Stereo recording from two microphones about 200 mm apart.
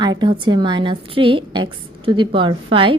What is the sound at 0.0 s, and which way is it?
A woman's voice, 20° right (ahead or behind).